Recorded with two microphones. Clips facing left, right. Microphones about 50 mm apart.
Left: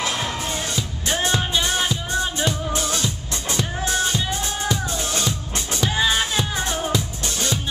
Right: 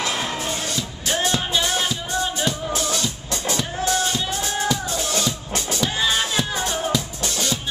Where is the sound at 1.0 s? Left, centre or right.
Centre.